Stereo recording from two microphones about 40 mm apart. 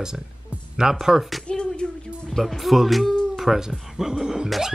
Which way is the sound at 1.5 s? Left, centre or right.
Left.